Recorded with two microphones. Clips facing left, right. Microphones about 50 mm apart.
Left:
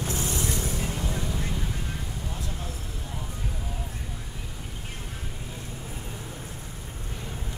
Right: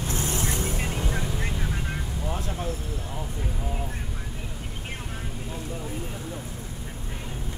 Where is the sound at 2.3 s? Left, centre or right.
Right.